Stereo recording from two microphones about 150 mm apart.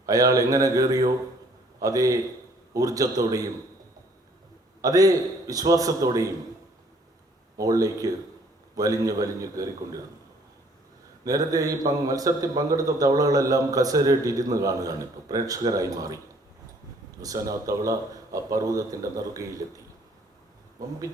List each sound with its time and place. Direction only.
0.0 s a man's voice: 25° right (ahead or behind)
4.8 s a man's voice: 25° right (ahead or behind)
7.6 s a man's voice: 25° right (ahead or behind)
11.2 s a man's voice: 25° right (ahead or behind)